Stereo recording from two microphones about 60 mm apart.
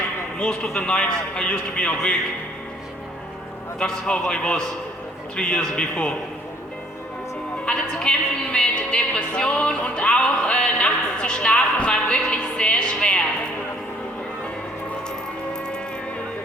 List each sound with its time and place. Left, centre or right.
0.3 s a man's voice: centre
3.8 s a man's voice: centre
7.6 s speech: centre